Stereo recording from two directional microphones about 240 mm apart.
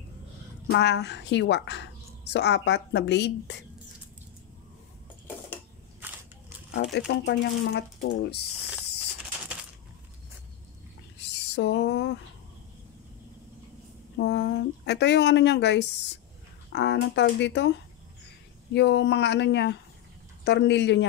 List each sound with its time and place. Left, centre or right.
0.7 s a woman's voice: left
6.7 s a woman's voice: left
11.5 s a woman's voice: left
14.1 s a woman's voice: left